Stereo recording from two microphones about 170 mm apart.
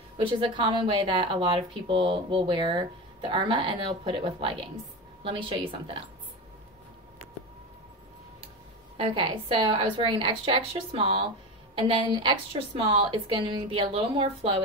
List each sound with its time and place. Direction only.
0.2 s speech: 30° right (ahead or behind)
8.9 s a woman's voice: 30° right (ahead or behind)